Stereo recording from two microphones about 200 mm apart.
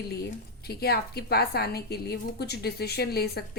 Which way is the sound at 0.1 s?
50° left (ahead or behind).